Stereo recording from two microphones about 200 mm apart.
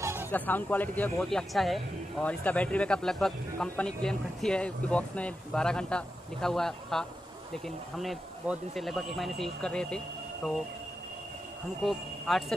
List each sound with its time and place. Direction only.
0.0 s a sound: 10° right (ahead or behind)
0.3 s a man's voice: 10° left (ahead or behind)
11.8 s a man's voice: centre (ahead or behind)